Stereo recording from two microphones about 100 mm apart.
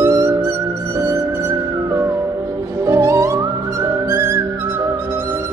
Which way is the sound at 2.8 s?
30° right (ahead or behind).